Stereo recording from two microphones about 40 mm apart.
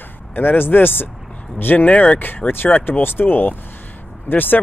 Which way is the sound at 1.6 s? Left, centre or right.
Left.